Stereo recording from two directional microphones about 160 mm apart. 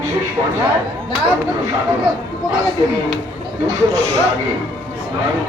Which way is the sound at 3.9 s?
45° left (ahead or behind).